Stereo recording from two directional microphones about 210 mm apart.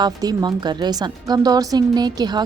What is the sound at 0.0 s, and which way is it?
A woman's voice, 20° right (ahead or behind).